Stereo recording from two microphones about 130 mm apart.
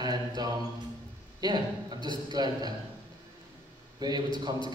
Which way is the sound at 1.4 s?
35° right (ahead or behind).